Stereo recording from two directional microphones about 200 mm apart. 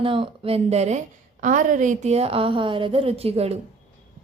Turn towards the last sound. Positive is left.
turn(degrees=-30)  # may be behind; listen again after turning